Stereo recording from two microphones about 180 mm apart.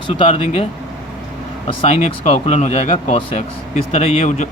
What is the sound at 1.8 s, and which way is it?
Speech, 35° left (ahead or behind).